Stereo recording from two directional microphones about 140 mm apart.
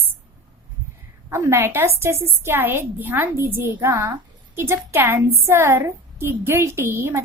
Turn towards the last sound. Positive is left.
turn(degrees=-15)  # may be behind; listen again after turning